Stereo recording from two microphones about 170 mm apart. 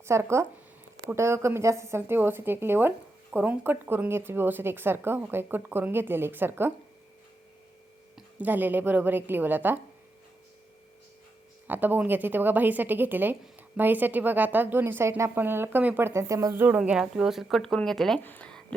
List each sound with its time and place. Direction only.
0.0 s a woman's voice: 15° right (ahead or behind)
8.1 s a woman's voice: 10° right (ahead or behind)
11.7 s a woman's voice: 10° right (ahead or behind); by 18.6 s 5° left (ahead or behind)